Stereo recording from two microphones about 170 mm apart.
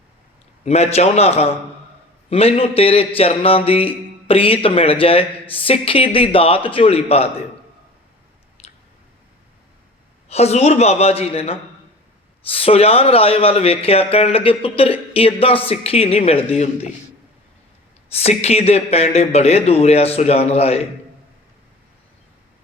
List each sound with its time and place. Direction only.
0.6 s speech: 40° left (ahead or behind)
8.6 s a sound: 40° left (ahead or behind)
10.2 s speech: 40° left (ahead or behind)
18.1 s speech: 35° left (ahead or behind)